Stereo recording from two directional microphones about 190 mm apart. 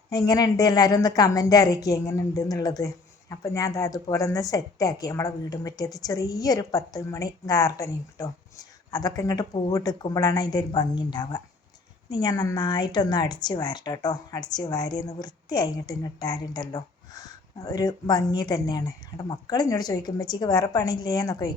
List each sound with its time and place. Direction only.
0.1 s a woman's voice: 20° left (ahead or behind)